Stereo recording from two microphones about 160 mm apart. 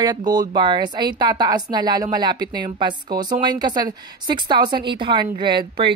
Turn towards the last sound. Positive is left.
turn(degrees=-30)  # may be behind; listen again after turning